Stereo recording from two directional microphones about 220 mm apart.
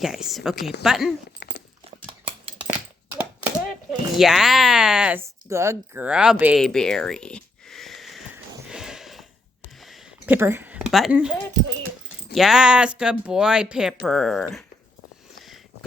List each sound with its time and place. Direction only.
0.0 s speech: centre (ahead or behind)
1.4 s dog: 50° left (ahead or behind)
2.6 s a sound: 10° right (ahead or behind)
4.2 s speech: centre (ahead or behind)
8.7 s a sound: centre (ahead or behind)
12.3 s speech: centre (ahead or behind)